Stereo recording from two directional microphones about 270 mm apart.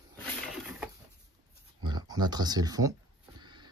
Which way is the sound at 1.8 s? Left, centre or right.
Centre.